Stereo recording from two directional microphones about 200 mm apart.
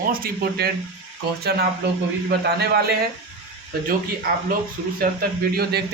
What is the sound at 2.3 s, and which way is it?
Speech, 55° right (ahead or behind).